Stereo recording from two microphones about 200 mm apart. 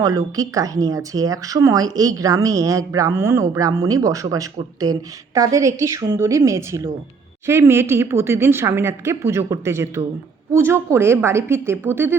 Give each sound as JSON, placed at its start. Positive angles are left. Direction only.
{"t": 0.0, "sound": "a woman's voice", "side_deg": -15}